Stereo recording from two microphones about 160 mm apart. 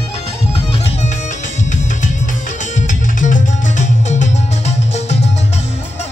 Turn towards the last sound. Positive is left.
turn(degrees=45)  # may be behind; listen again after turning